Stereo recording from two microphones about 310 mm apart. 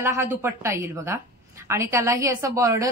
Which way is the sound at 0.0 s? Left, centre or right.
Centre.